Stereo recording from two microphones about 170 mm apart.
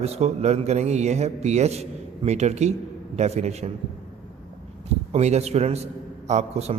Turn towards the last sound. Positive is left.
turn(degrees=-40)  # may be behind; listen again after turning